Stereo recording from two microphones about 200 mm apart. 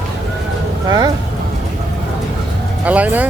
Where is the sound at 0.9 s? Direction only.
20° right (ahead or behind).